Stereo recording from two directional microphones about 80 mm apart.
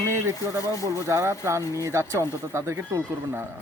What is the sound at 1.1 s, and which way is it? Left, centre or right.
Speech, right.